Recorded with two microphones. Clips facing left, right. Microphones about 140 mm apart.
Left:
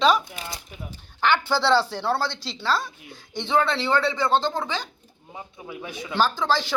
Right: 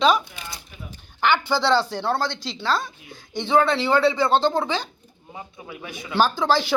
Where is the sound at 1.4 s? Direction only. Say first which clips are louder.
Even; 5° left (ahead or behind); by 4.8 s 20° right (ahead or behind).